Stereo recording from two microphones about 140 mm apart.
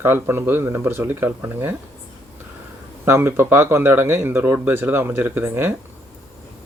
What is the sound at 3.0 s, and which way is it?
Speech, 15° right (ahead or behind).